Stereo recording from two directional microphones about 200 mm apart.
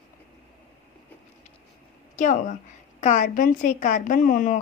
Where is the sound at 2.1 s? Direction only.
40° left (ahead or behind).